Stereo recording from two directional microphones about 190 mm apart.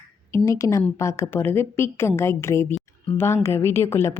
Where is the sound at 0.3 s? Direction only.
15° left (ahead or behind).